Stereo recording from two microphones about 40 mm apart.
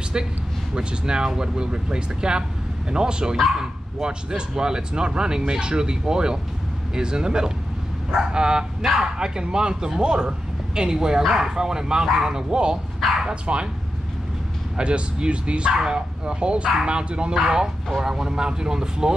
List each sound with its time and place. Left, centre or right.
0.1 s speech: right
14.8 s speech: right